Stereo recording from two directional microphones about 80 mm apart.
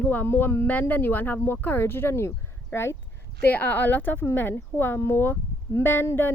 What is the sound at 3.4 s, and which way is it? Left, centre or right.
Speech, left.